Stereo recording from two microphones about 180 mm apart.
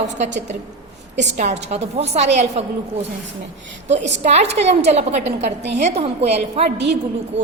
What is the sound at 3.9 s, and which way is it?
A woman's voice, 40° right (ahead or behind).